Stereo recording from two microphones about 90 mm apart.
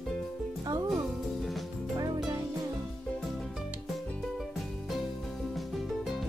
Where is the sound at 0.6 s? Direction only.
45° right (ahead or behind).